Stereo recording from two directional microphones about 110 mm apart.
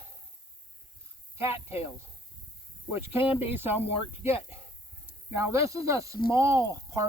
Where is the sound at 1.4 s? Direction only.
20° right (ahead or behind).